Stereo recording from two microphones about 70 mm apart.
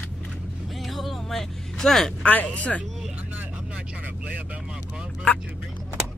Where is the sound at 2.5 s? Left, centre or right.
Centre.